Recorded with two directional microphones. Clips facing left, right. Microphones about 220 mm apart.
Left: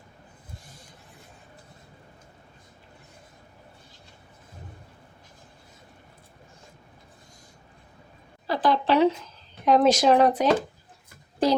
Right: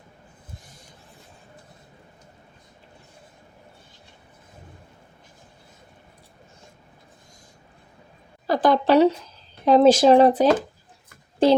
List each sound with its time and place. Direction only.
8.4 s a woman's voice: 45° right (ahead or behind)
9.6 s speech: 30° right (ahead or behind)